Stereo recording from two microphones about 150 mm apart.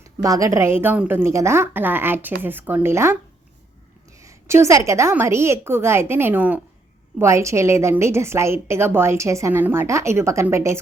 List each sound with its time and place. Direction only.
0.0 s a woman's voice: 20° right (ahead or behind)
4.2 s a woman's voice: 20° right (ahead or behind)